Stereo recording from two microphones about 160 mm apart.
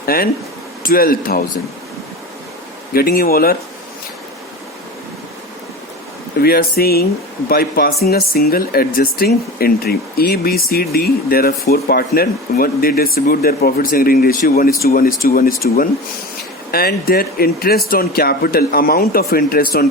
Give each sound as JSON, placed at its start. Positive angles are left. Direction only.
{"t": 0.0, "sound": "speech", "side_deg": 65}
{"t": 2.9, "sound": "speech", "side_deg": 65}
{"t": 6.4, "sound": "speech", "side_deg": 75}